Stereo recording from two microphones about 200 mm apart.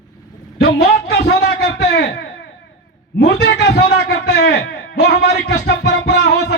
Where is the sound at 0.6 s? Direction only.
50° left (ahead or behind).